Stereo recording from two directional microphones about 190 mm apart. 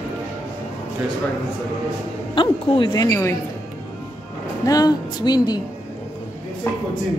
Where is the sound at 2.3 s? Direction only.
25° left (ahead or behind).